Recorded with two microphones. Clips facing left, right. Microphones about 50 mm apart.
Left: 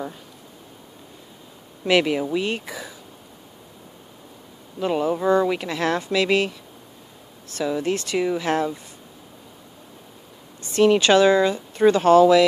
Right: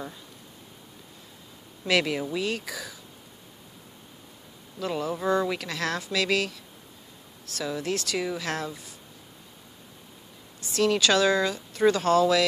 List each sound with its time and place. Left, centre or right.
1.9 s speech: left
4.7 s speech: left
10.6 s speech: left